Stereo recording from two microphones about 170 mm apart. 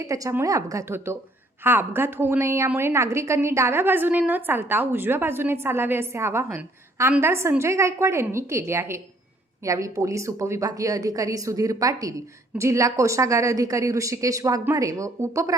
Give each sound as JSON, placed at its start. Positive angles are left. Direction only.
{"t": 0.0, "sound": "a woman's voice", "side_deg": -20}